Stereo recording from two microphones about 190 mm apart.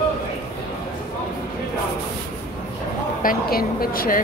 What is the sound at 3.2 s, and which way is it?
Speech, 50° left (ahead or behind).